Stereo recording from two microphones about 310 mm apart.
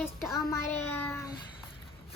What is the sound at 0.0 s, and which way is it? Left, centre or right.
Child singing, centre.